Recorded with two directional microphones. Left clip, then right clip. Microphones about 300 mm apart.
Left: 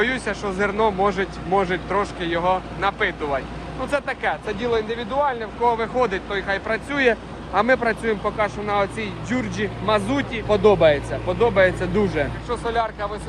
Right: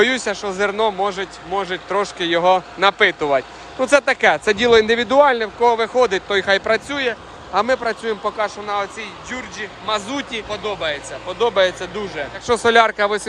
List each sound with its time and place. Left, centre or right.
0.0 s speech: centre
12.5 s speech: right